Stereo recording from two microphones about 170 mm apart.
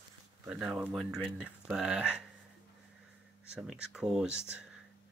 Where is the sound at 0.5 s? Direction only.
5° right (ahead or behind).